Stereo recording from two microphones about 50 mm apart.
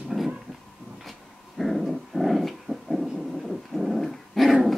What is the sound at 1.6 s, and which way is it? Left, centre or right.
Dog, centre.